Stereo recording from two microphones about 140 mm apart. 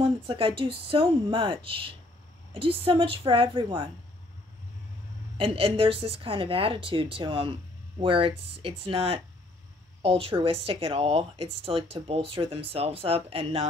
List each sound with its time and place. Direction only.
0.0 s a woman's voice: 40° right (ahead or behind)
5.4 s a woman's voice: 40° right (ahead or behind)